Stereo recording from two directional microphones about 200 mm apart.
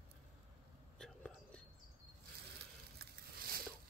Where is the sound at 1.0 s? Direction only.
5° left (ahead or behind).